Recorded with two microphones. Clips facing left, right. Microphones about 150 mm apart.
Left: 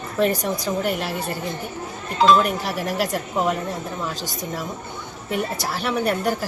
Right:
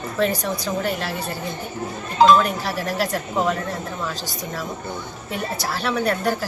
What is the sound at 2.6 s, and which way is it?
Speech, 15° left (ahead or behind).